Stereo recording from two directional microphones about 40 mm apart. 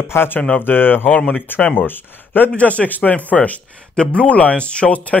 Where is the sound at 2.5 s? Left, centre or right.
Left.